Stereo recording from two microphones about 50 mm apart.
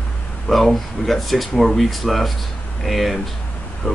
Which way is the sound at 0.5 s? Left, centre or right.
Centre.